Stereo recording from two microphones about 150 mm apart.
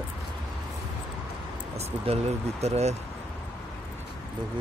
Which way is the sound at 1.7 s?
45° right (ahead or behind).